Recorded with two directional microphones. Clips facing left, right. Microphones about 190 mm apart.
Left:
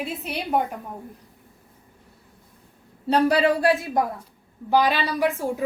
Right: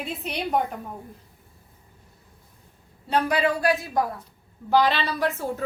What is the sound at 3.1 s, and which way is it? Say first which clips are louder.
Speech: left 4 dB; 35° left (ahead or behind).